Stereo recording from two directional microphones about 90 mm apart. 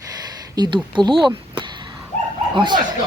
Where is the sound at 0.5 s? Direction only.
55° right (ahead or behind).